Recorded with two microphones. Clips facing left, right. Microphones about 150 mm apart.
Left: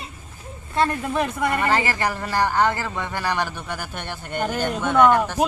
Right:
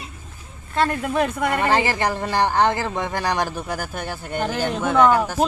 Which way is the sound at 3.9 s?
Centre (ahead or behind).